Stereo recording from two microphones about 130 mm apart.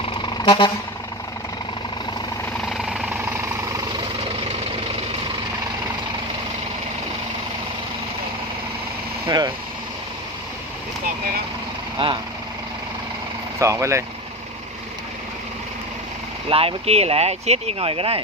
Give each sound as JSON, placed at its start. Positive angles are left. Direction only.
{"t": 0.0, "sound": "vehicle", "side_deg": 40}
{"t": 2.6, "sound": "vehicle", "side_deg": 0}
{"t": 9.2, "sound": "vehicle", "side_deg": -35}
{"t": 12.0, "sound": "vehicle", "side_deg": -45}
{"t": 13.6, "sound": "speech", "side_deg": -20}
{"t": 16.5, "sound": "speech", "side_deg": -45}